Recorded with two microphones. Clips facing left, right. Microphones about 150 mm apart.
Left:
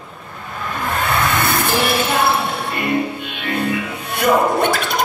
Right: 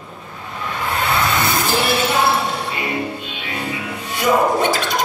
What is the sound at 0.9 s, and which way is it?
Vehicle, 50° left (ahead or behind).